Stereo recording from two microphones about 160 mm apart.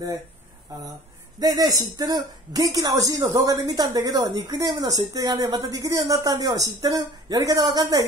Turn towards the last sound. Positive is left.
turn(degrees=-25)  # may be behind; listen again after turning